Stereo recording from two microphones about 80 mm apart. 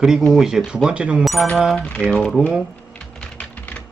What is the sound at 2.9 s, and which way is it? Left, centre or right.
Typing, centre.